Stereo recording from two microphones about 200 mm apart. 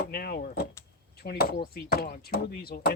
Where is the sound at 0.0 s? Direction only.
50° left (ahead or behind).